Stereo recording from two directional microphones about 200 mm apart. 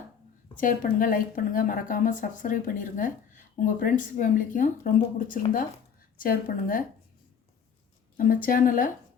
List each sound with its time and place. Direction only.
0.5 s a woman's voice: 40° left (ahead or behind)
8.1 s a woman's voice: 45° left (ahead or behind)